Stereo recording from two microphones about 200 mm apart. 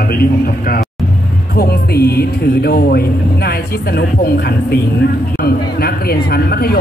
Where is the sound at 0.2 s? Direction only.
50° left (ahead or behind).